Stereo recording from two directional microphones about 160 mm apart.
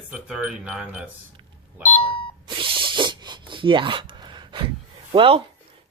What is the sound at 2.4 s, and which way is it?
Spray, 30° right (ahead or behind).